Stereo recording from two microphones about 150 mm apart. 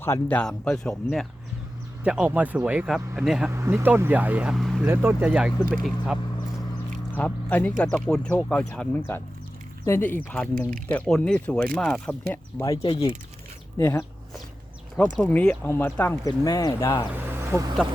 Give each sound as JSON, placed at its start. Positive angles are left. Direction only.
{"t": 0.0, "sound": "speech", "side_deg": 15}
{"t": 2.0, "sound": "speech", "side_deg": -10}
{"t": 3.5, "sound": "speech", "side_deg": -20}
{"t": 4.8, "sound": "speech", "side_deg": -15}
{"t": 12.7, "sound": "speech", "side_deg": 40}
{"t": 13.7, "sound": "speech", "side_deg": 20}
{"t": 15.2, "sound": "speech", "side_deg": 10}
{"t": 16.4, "sound": "speech", "side_deg": 25}
{"t": 17.2, "sound": "vehicle", "side_deg": -15}